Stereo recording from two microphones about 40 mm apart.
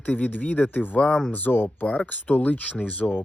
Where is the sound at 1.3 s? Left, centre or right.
Left.